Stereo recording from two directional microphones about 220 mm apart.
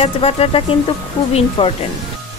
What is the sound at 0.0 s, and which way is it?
Speech, 25° left (ahead or behind).